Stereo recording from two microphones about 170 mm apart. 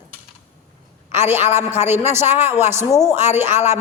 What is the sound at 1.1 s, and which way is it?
A man's voice, 15° right (ahead or behind).